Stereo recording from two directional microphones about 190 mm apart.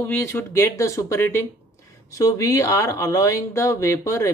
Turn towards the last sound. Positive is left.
turn(degrees=15)  # may be behind; listen again after turning